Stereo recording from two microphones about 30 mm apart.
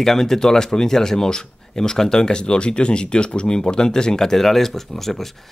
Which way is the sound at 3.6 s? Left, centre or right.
Left.